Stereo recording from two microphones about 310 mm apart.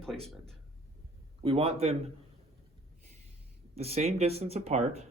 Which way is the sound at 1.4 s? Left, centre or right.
Centre.